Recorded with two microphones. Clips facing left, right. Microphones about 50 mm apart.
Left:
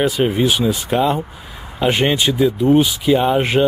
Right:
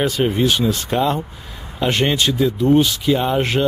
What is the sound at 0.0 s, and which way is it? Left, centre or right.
Speech, centre.